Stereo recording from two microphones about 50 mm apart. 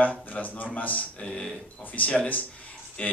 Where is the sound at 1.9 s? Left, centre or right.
Left.